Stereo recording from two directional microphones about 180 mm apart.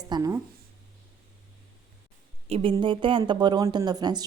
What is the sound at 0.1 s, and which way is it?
Speech, 20° right (ahead or behind).